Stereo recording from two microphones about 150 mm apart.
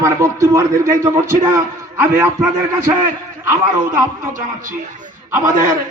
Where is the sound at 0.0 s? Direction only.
20° right (ahead or behind).